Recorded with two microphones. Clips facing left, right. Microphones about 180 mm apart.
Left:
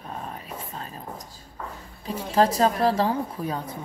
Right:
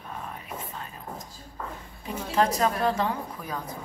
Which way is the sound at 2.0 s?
30° left (ahead or behind).